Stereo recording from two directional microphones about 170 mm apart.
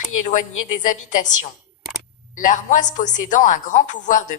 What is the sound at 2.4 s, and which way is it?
A woman's voice, 50° left (ahead or behind).